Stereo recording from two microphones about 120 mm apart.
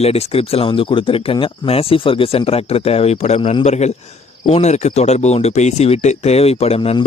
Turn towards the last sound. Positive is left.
turn(degrees=55)  # may be behind; listen again after turning